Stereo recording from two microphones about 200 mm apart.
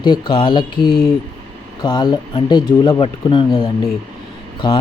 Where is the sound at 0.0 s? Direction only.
20° left (ahead or behind).